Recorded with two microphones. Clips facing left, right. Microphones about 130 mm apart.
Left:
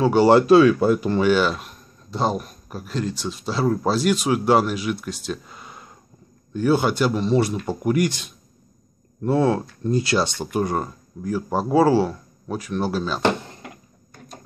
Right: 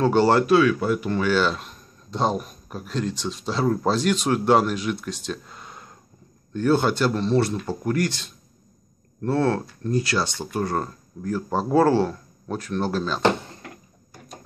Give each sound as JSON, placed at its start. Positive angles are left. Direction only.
{"t": 0.0, "sound": "speech", "side_deg": 10}
{"t": 0.3, "sound": "speech", "side_deg": 20}
{"t": 0.6, "sound": "speech", "side_deg": 30}
{"t": 1.2, "sound": "speech", "side_deg": 10}